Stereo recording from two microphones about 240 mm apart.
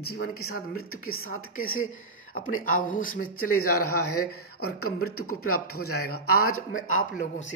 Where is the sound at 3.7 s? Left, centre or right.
Left.